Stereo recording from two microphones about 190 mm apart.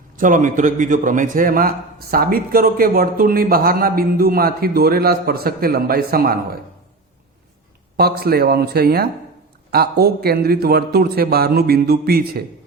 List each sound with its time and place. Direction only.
0.2 s a man's voice: 45° right (ahead or behind)
7.9 s a man's voice: 55° right (ahead or behind)